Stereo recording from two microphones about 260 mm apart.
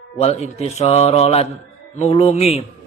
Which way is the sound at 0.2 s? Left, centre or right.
Left.